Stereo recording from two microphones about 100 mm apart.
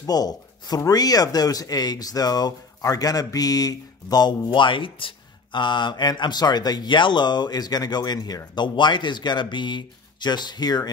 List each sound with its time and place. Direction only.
0.0 s speech: 40° left (ahead or behind)